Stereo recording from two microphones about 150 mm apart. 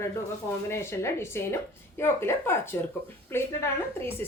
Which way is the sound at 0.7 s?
15° left (ahead or behind).